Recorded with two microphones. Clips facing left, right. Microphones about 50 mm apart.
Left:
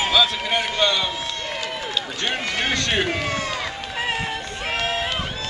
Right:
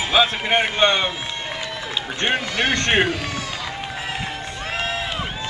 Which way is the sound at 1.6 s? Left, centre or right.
Right.